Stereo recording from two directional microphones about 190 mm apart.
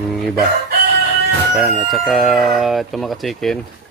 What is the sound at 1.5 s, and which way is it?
Speech, centre (ahead or behind).